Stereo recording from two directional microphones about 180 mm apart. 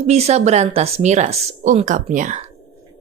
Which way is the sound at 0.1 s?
35° right (ahead or behind).